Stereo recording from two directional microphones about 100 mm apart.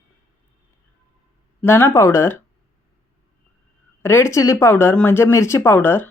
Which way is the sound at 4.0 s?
25° left (ahead or behind).